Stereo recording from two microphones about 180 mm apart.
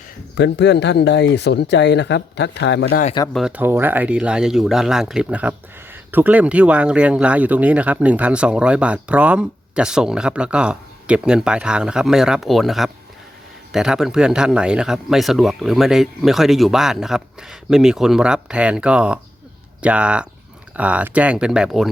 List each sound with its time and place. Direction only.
0.3 s speech: 70° left (ahead or behind)
3.3 s speech: 5° right (ahead or behind)